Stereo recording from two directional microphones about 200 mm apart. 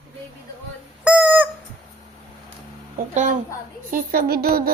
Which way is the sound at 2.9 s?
40° right (ahead or behind).